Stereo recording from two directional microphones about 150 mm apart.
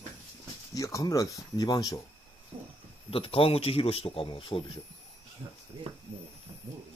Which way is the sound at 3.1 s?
40° left (ahead or behind).